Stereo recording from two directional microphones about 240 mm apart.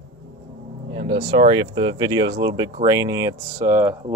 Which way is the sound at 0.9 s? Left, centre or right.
Right.